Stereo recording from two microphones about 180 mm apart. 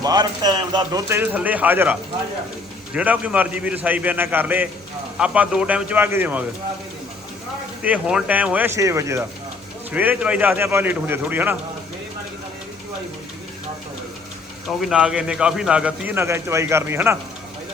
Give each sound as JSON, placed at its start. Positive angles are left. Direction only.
{"t": 0.0, "sound": "speech", "side_deg": -20}
{"t": 1.1, "sound": "a man's voice", "side_deg": -10}
{"t": 7.8, "sound": "a man's voice", "side_deg": -5}
{"t": 14.8, "sound": "speech", "side_deg": -5}